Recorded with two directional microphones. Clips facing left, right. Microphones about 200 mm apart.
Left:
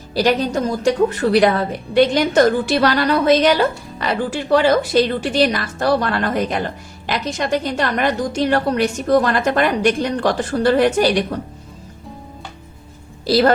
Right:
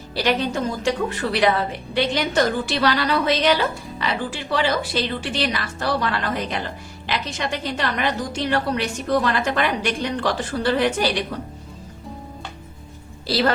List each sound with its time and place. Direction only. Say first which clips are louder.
0.1 s a woman's voice: left 5 dB; 40° left (ahead or behind)
13.2 s a woman's voice: left 6 dB; 45° left (ahead or behind)